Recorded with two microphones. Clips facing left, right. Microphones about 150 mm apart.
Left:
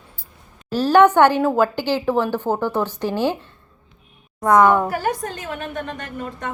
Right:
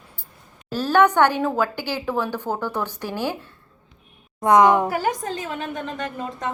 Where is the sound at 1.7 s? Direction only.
10° right (ahead or behind).